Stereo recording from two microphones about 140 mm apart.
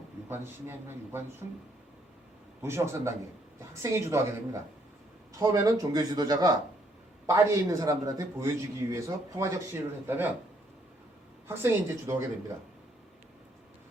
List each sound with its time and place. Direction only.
0.3 s a man's voice: 15° right (ahead or behind)
2.6 s a man's voice: 20° right (ahead or behind)
11.4 s a man's voice: 20° right (ahead or behind)